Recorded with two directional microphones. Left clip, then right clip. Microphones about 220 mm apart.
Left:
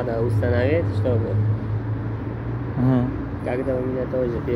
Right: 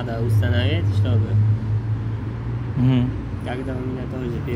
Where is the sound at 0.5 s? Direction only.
40° right (ahead or behind).